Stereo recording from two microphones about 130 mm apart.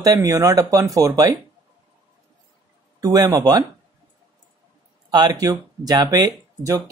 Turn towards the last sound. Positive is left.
turn(degrees=-30)  # may be behind; listen again after turning